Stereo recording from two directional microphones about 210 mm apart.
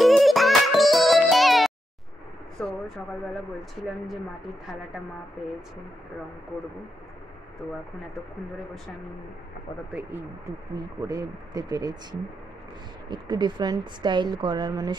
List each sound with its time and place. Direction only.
0.0 s music: centre (ahead or behind)
2.6 s vehicle: centre (ahead or behind)
11.0 s a woman's voice: 15° right (ahead or behind)